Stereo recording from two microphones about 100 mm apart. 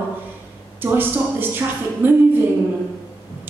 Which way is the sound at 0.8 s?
20° right (ahead or behind).